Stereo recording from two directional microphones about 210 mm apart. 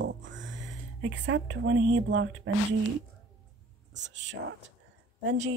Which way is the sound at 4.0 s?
55° right (ahead or behind).